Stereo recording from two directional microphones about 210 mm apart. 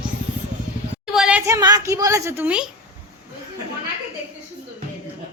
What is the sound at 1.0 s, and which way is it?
A woman's voice, 5° right (ahead or behind).